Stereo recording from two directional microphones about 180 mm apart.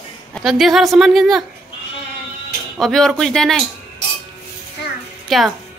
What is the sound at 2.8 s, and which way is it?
Speech, centre (ahead or behind).